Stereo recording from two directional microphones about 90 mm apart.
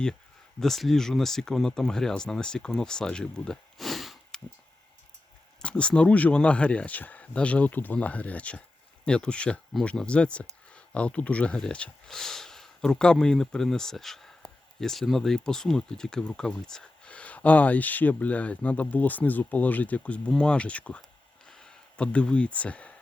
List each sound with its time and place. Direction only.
0.6 s speech: 5° left (ahead or behind)
5.6 s speech: 10° left (ahead or behind)
21.4 s a sound: 10° left (ahead or behind)